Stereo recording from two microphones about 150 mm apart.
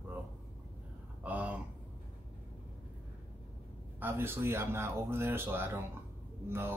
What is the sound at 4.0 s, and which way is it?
Speech, 15° right (ahead or behind).